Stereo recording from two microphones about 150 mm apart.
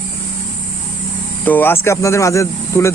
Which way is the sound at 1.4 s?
15° left (ahead or behind).